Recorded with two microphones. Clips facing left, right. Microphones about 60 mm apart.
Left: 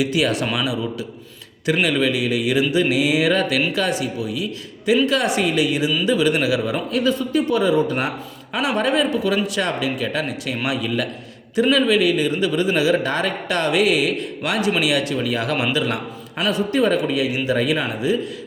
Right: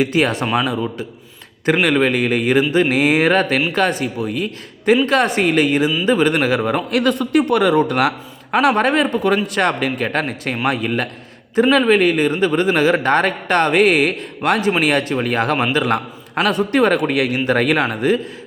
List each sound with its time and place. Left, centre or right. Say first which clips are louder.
0.0 s a man's voice: right 3 dB; right
8.5 s a man's voice: right 5 dB; right